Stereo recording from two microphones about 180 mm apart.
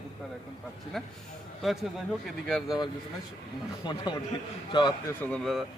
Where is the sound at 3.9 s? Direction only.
25° left (ahead or behind).